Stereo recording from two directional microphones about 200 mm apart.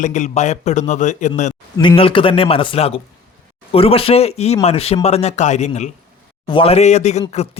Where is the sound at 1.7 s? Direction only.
25° left (ahead or behind).